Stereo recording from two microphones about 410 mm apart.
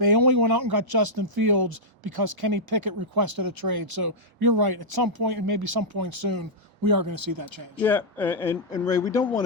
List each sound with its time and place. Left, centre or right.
0.0 s speech: right
7.8 s speech: centre